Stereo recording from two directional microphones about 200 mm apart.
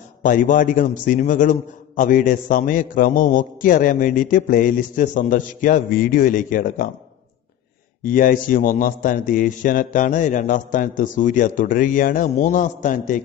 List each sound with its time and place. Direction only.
0.2 s a man's voice: 40° left (ahead or behind)
8.0 s a man's voice: 45° left (ahead or behind)